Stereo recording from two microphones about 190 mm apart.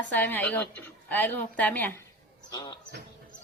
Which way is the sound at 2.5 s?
20° left (ahead or behind).